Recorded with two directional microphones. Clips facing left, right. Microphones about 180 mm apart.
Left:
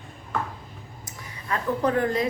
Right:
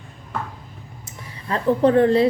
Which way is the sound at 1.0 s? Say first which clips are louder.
Right 3 dB; 30° right (ahead or behind).